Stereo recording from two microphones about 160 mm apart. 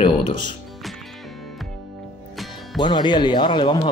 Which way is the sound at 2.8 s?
30° left (ahead or behind).